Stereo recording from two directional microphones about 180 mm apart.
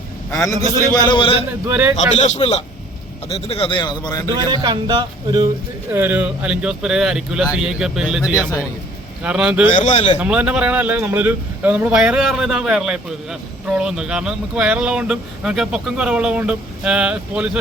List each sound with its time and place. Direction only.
0.3 s a man's voice: 10° left (ahead or behind)
0.9 s speech: 25° left (ahead or behind)
1.5 s a man's voice: 10° right (ahead or behind)
2.0 s speech: 40° left (ahead or behind); by 4.3 s 20° left (ahead or behind)
4.4 s speech: 25° right (ahead or behind)
5.9 s speech: 10° right (ahead or behind)
9.2 s speech: 5° right (ahead or behind)
9.7 s speech: 40° left (ahead or behind)
10.2 s a man's voice: 5° right (ahead or behind)